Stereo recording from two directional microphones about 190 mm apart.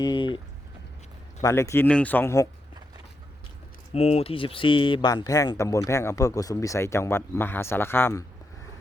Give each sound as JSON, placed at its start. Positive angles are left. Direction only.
{"t": 0.0, "sound": "a sound", "side_deg": 25}
{"t": 1.4, "sound": "speech", "side_deg": 15}
{"t": 3.9, "sound": "speech", "side_deg": 35}